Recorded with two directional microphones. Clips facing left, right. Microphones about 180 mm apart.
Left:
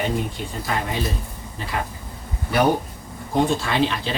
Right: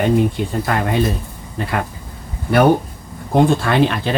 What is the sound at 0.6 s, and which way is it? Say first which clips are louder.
Speech: right 5 dB; 60° right (ahead or behind).